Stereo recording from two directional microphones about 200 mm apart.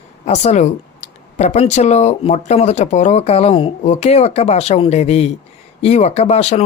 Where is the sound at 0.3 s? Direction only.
35° left (ahead or behind).